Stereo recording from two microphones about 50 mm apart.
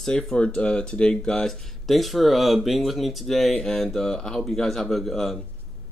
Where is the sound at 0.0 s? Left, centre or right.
Centre.